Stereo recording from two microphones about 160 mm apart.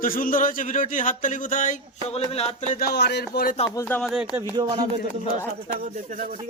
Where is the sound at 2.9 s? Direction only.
90° left; by 3.6 s 70° left (ahead or behind).